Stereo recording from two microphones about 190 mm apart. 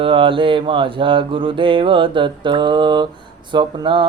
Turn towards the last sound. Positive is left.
turn(degrees=-25)  # may be behind; listen again after turning